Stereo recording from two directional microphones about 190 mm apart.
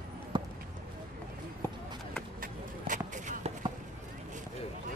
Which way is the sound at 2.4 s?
45° right (ahead or behind).